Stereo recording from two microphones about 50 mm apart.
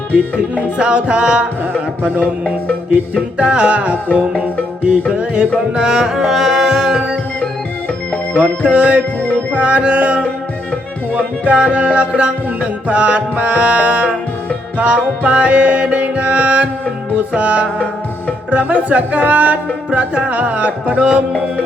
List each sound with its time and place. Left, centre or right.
0.3 s music: right
2.9 s music: right
5.0 s music: right
8.1 s music: left
8.6 s music: right
9.2 s music: left
9.6 s music: right